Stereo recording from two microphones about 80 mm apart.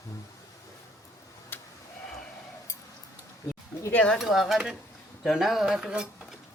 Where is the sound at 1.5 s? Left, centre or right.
Left.